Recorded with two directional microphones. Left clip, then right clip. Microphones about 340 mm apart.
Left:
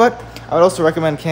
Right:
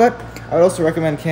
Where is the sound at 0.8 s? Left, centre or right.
Centre.